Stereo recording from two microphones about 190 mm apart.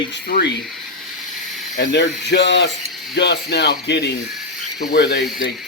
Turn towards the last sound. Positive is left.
turn(degrees=60)  # may be behind; listen again after turning